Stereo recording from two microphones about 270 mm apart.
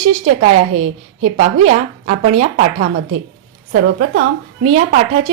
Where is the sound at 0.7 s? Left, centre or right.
Right.